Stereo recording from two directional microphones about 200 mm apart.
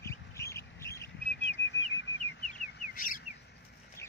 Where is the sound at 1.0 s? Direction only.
60° left (ahead or behind); by 3.3 s 45° left (ahead or behind).